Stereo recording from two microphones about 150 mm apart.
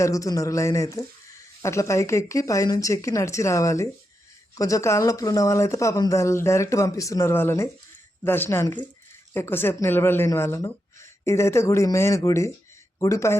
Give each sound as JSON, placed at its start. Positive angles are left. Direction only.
{"t": 0.0, "sound": "speech", "side_deg": 20}